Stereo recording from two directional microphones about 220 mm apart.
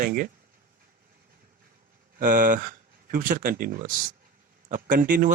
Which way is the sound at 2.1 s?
40° right (ahead or behind).